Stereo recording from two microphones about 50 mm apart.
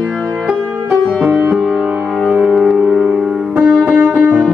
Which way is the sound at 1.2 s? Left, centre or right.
Centre.